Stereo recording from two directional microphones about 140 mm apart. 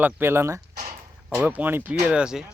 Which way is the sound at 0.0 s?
15° right (ahead or behind).